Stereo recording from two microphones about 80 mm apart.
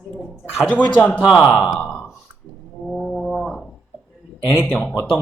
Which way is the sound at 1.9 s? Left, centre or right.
Centre.